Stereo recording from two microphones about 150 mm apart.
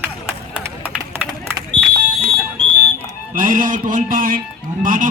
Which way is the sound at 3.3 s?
65° right (ahead or behind).